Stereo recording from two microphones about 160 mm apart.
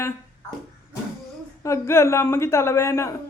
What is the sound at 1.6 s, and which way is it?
A woman's voice, 15° left (ahead or behind).